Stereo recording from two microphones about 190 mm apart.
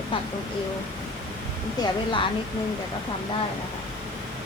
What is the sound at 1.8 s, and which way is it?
Speech, 25° left (ahead or behind).